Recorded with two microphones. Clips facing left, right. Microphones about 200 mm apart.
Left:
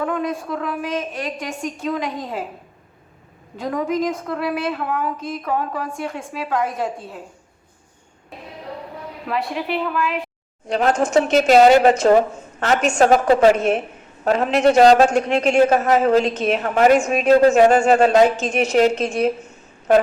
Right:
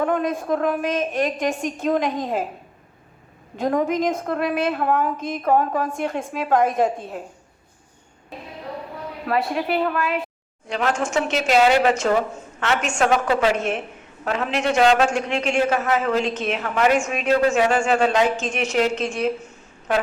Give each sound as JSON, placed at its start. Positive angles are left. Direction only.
{"t": 0.0, "sound": "a woman's voice", "side_deg": -50}
{"t": 3.6, "sound": "a woman's voice", "side_deg": -50}
{"t": 9.5, "sound": "a woman's voice", "side_deg": -45}
{"t": 10.7, "sound": "a woman's voice", "side_deg": 40}